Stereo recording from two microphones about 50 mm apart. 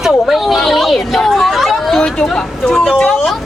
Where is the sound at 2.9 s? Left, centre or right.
Left.